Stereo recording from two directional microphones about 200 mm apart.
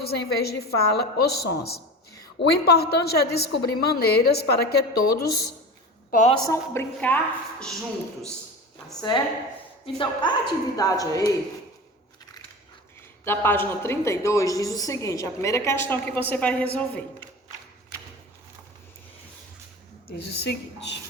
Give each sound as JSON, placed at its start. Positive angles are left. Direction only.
{"t": 0.0, "sound": "a woman's voice", "side_deg": 50}
{"t": 6.1, "sound": "a woman's voice", "side_deg": 35}
{"t": 6.4, "sound": "a woman's voice", "side_deg": 15}
{"t": 9.1, "sound": "a woman's voice", "side_deg": 20}
{"t": 13.2, "sound": "a woman's voice", "side_deg": 10}
{"t": 20.1, "sound": "a woman's voice", "side_deg": 55}